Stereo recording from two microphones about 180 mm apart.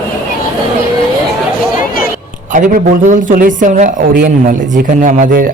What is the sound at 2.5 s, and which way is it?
A man's voice, 50° right (ahead or behind).